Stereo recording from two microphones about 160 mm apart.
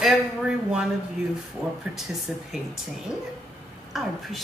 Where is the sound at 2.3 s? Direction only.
Centre (ahead or behind).